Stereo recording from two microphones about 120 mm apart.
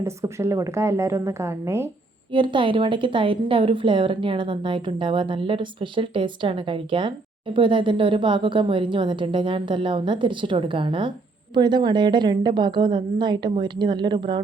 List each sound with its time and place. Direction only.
0.0 s a woman's voice: 25° right (ahead or behind)
2.3 s a woman's voice: 40° right (ahead or behind)